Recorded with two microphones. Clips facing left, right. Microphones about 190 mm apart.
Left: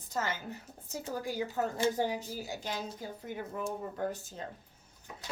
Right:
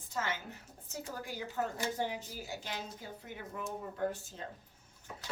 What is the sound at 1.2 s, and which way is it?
Speech, 40° left (ahead or behind).